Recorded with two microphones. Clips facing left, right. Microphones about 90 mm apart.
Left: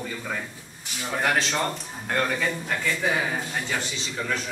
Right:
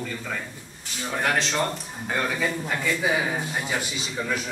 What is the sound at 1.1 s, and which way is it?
A man's voice, centre (ahead or behind).